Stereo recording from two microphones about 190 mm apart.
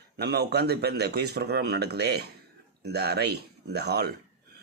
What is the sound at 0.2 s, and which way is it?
Speech, 60° right (ahead or behind).